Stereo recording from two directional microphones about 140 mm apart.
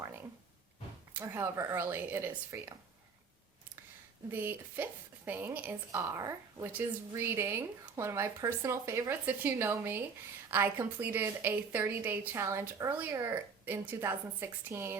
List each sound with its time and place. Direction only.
1.2 s a woman's voice: 15° right (ahead or behind)
4.3 s a woman's voice: 15° right (ahead or behind)